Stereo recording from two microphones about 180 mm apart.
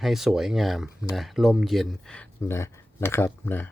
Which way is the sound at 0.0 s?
Centre (ahead or behind).